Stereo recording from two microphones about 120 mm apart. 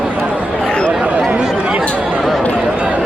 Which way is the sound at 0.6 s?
5° left (ahead or behind).